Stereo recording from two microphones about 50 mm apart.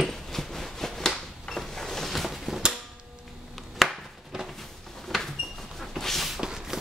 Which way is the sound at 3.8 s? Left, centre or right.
Centre.